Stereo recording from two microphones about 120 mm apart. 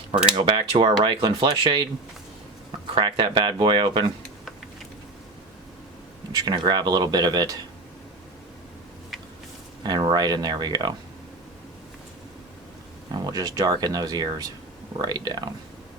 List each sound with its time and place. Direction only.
0.3 s speech: 45° right (ahead or behind)
2.9 s speech: 45° right (ahead or behind)
6.3 s speech: 35° right (ahead or behind)
9.8 s speech: 35° right (ahead or behind)
13.1 s speech: 35° right (ahead or behind)